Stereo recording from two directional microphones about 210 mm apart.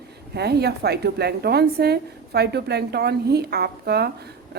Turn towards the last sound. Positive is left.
turn(degrees=-50)  # may be behind; listen again after turning